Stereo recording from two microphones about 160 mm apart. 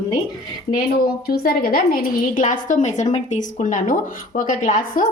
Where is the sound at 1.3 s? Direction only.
70° left (ahead or behind).